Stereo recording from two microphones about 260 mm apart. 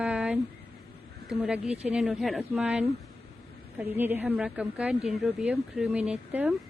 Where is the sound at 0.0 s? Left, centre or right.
Centre.